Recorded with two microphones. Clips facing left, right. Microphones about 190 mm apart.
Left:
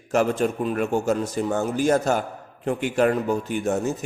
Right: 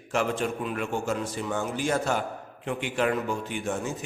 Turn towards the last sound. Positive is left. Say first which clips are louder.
# left 7 dB
turn(degrees=40)  # may be behind; listen again after turning